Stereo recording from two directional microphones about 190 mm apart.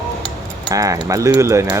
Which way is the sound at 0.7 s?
20° right (ahead or behind).